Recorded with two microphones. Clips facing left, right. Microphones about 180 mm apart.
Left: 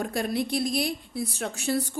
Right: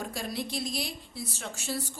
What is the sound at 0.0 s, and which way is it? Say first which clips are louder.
A woman's voice: left 7 dB; 60° left (ahead or behind).